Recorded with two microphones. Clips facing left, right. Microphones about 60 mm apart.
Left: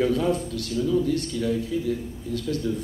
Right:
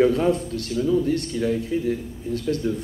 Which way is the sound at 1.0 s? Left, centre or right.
Right.